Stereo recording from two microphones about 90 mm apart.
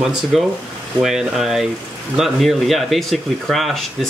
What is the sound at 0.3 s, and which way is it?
Speech, centre (ahead or behind).